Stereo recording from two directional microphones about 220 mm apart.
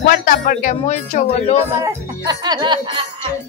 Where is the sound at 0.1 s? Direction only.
40° left (ahead or behind).